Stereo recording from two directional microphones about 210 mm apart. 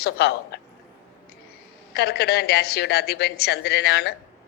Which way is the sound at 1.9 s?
50° left (ahead or behind).